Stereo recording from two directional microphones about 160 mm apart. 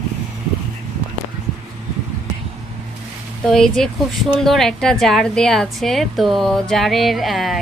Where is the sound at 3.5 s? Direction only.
Centre (ahead or behind).